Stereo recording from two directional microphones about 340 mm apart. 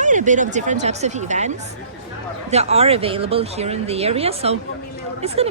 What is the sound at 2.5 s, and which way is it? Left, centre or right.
Speech, centre.